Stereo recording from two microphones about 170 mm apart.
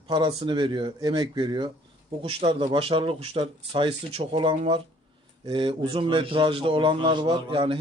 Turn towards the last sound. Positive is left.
turn(degrees=-30)  # may be behind; listen again after turning